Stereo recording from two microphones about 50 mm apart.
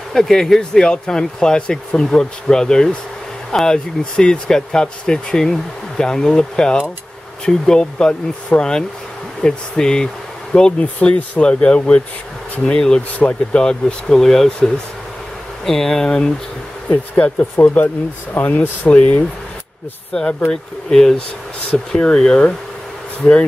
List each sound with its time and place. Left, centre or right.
0.1 s speech: centre
10.8 s speech: left
17.2 s speech: left
20.1 s speech: left
20.9 s speech: centre